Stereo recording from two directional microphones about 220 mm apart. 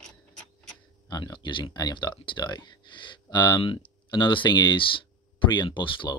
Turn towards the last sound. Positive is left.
turn(degrees=20)  # may be behind; listen again after turning